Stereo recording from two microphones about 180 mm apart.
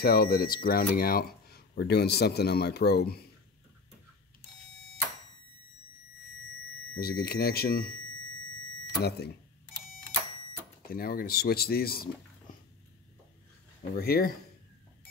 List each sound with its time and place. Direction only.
0.0 s speech: 55° left (ahead or behind)
7.0 s speech: 60° left (ahead or behind)
10.8 s speech: 55° left (ahead or behind)
13.9 s speech: 55° left (ahead or behind)